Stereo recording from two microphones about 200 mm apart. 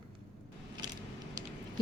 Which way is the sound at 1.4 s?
20° right (ahead or behind).